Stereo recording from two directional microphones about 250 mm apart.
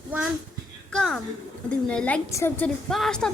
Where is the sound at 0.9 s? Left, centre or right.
Centre.